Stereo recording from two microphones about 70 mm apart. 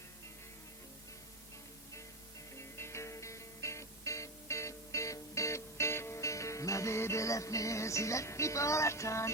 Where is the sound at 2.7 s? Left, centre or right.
Left.